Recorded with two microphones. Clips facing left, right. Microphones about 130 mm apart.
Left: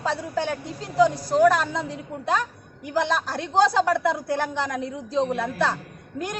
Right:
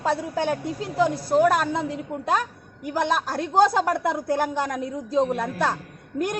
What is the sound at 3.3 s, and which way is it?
A woman's voice, 45° right (ahead or behind).